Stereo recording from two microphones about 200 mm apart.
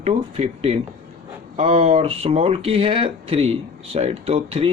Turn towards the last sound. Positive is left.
turn(degrees=-30)  # may be behind; listen again after turning